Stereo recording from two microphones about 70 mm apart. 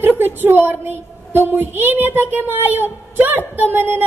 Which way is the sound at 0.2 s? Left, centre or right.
Right.